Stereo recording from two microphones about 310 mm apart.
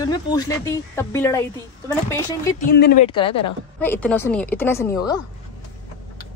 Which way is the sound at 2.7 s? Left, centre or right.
Left.